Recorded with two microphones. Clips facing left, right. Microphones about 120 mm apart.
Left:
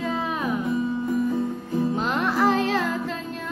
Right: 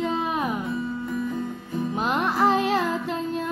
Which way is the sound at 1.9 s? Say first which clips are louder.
Even; 15° right (ahead or behind).